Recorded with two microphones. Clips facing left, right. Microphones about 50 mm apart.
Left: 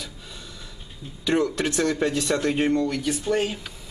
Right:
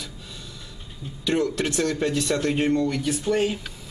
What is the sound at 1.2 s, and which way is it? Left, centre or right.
Speech, centre.